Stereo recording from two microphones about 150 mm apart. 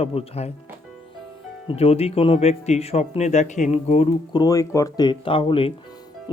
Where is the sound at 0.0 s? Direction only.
40° left (ahead or behind).